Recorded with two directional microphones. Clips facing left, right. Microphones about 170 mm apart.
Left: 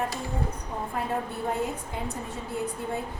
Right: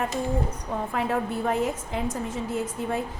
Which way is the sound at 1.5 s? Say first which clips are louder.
Right 3 dB; 90° right.